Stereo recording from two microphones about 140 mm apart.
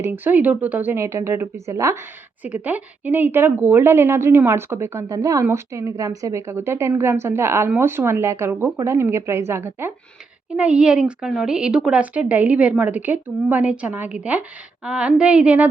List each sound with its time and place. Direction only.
0.0 s a woman's voice: 15° right (ahead or behind)